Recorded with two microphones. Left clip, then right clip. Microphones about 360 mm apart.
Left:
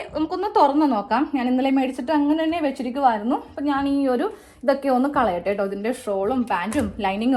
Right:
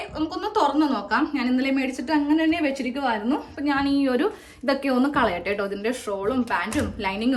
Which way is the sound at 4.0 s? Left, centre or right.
Centre.